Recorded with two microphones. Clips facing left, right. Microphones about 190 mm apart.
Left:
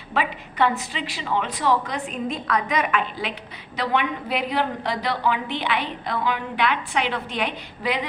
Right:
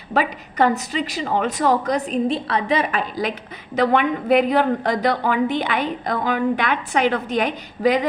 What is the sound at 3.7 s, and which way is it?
A woman's voice, 50° right (ahead or behind).